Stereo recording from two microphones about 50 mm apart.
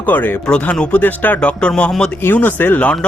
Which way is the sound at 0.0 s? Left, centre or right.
Left.